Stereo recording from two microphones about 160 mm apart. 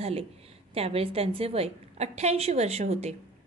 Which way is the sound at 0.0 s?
40° right (ahead or behind).